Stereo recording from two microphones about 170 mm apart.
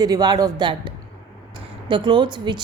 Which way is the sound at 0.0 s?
25° right (ahead or behind).